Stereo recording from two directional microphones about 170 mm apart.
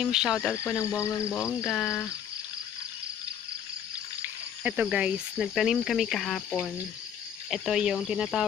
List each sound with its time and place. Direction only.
0.0 s cricket: 5° right (ahead or behind)
0.5 s cricket: 15° left (ahead or behind)
1.7 s cricket: centre (ahead or behind)
4.2 s cricket: 10° right (ahead or behind)